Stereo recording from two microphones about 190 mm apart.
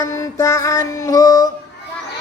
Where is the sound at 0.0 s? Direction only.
15° left (ahead or behind).